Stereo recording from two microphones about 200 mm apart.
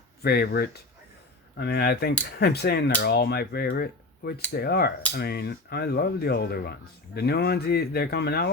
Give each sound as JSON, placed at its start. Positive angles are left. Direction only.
{"t": 0.2, "sound": "speech", "side_deg": 50}